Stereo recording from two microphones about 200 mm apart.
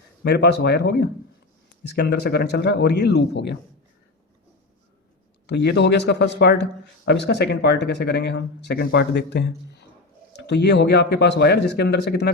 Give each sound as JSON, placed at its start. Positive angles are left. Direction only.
{"t": 0.2, "sound": "speech", "side_deg": 55}
{"t": 5.5, "sound": "speech", "side_deg": 55}